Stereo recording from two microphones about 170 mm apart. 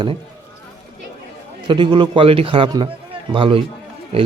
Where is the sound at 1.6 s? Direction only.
30° right (ahead or behind).